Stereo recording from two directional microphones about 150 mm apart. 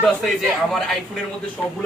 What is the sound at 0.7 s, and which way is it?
Speech, centre (ahead or behind).